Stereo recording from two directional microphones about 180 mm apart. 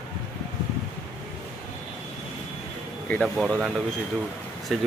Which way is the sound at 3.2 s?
5° right (ahead or behind).